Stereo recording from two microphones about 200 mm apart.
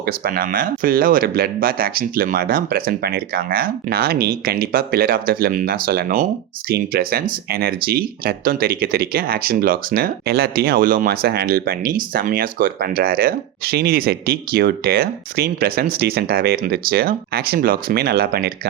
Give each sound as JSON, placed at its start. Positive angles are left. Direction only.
{"t": 0.0, "sound": "speech", "side_deg": -50}